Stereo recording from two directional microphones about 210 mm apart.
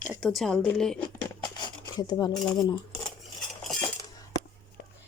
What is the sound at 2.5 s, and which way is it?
Cutlery, 20° left (ahead or behind).